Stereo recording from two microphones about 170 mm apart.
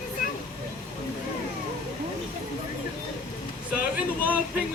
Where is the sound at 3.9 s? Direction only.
5° right (ahead or behind).